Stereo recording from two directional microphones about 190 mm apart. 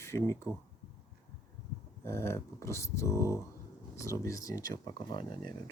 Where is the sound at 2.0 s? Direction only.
15° left (ahead or behind).